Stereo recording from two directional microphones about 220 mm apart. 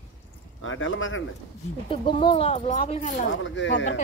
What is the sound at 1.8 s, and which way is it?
Speech, 25° left (ahead or behind).